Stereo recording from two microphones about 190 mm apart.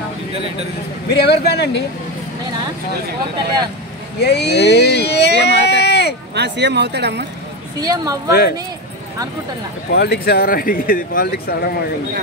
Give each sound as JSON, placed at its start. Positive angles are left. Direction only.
{"t": 1.1, "sound": "speech", "side_deg": 60}
{"t": 4.2, "sound": "speech", "side_deg": 60}
{"t": 6.3, "sound": "speech", "side_deg": -65}
{"t": 7.8, "sound": "speech", "side_deg": -20}
{"t": 8.3, "sound": "speech", "side_deg": 60}
{"t": 9.9, "sound": "speech", "side_deg": 60}